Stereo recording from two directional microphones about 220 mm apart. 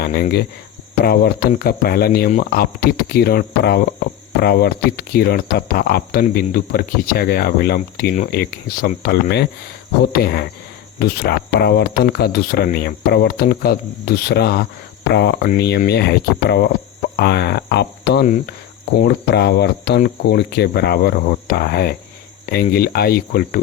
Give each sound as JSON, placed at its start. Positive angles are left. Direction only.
{"t": 0.0, "sound": "speech", "side_deg": 45}